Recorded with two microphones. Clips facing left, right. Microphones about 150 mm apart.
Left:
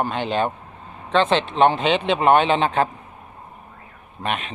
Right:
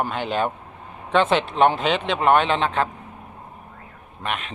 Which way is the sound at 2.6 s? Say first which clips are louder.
Left 2 dB; 35° left (ahead or behind).